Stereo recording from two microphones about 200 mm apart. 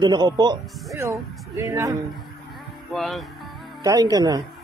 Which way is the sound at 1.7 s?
15° right (ahead or behind).